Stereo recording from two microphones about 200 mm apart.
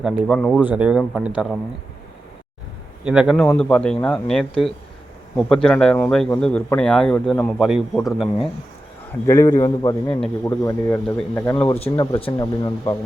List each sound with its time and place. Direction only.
0.0 s a man's voice: centre (ahead or behind)
0.6 s a man's voice: 5° right (ahead or behind)
3.0 s a man's voice: 5° right (ahead or behind)
9.2 s a man's voice: 15° left (ahead or behind)
10.2 s a man's voice: 10° left (ahead or behind)